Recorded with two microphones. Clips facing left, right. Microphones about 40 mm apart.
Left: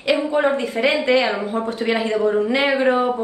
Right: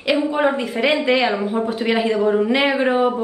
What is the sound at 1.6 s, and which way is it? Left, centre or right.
Speech, right.